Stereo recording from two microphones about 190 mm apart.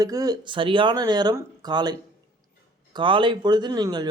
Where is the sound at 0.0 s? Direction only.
20° right (ahead or behind).